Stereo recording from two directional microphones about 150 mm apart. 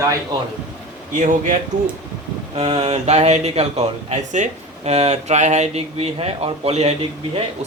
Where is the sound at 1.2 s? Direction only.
60° right (ahead or behind).